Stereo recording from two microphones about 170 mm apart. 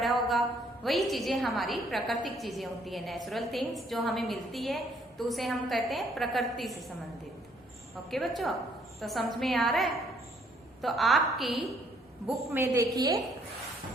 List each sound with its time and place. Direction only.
0.0 s a woman's voice: centre (ahead or behind)
8.1 s a woman's voice: centre (ahead or behind)
12.5 s a woman's voice: 15° right (ahead or behind)